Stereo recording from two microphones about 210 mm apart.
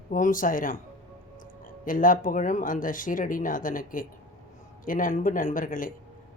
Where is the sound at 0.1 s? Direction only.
40° left (ahead or behind).